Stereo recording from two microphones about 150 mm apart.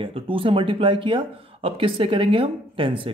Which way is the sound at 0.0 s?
35° right (ahead or behind).